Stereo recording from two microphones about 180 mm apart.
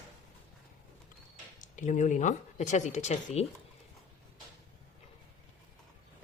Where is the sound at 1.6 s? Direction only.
45° left (ahead or behind).